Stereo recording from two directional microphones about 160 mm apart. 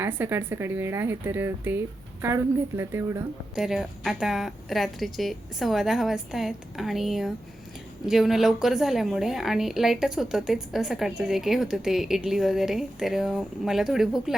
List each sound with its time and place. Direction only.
0.0 s speech: 15° right (ahead or behind)
3.5 s speech: 5° right (ahead or behind)